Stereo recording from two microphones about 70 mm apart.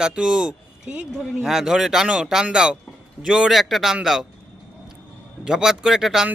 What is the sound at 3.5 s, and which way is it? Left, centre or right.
Speech, centre.